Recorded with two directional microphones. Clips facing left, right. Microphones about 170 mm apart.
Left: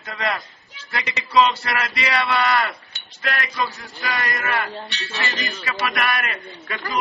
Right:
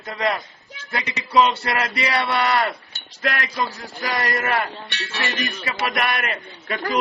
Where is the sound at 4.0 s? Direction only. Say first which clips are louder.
Right 3 dB; 40° right (ahead or behind).